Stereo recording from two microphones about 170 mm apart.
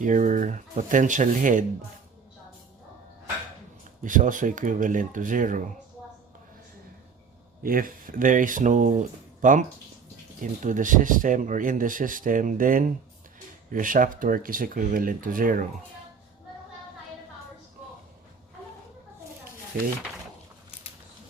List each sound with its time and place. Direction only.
0.0 s speech: 50° right (ahead or behind)
4.0 s speech: 50° right (ahead or behind)
7.6 s speech: 55° right (ahead or behind)
19.7 s speech: 60° right (ahead or behind)